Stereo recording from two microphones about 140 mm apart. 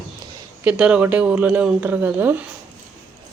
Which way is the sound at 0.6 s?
10° right (ahead or behind).